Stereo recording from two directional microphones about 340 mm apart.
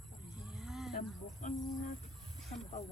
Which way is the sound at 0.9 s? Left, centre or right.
Left.